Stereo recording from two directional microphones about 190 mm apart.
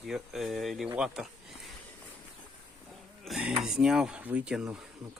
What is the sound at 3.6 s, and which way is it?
Speech, 5° right (ahead or behind).